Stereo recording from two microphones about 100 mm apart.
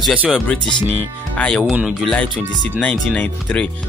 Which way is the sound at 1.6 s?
5° right (ahead or behind).